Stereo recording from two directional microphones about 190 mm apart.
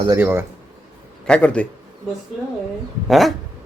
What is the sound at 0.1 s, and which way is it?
Speech, 10° right (ahead or behind).